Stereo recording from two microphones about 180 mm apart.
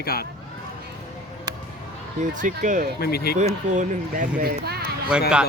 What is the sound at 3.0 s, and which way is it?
Speech, 60° left (ahead or behind).